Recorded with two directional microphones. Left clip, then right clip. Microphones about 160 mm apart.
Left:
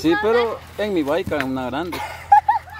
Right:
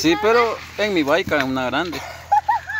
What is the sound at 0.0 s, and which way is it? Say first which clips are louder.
Speech: right 1 dB; 10° right (ahead or behind).